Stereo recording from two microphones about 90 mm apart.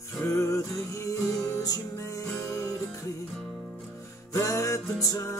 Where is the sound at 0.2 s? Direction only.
35° left (ahead or behind).